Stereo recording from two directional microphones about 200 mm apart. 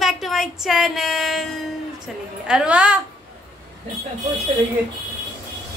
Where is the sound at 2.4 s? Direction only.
5° right (ahead or behind).